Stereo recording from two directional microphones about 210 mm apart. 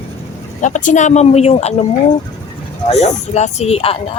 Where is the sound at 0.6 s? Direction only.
35° left (ahead or behind).